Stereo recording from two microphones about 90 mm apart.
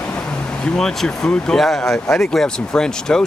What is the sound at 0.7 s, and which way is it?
Speech, 5° left (ahead or behind).